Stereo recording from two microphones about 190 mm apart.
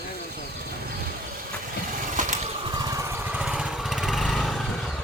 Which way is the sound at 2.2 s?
40° right (ahead or behind).